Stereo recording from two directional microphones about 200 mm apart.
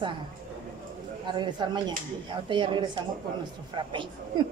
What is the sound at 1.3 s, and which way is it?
Speech, 20° right (ahead or behind).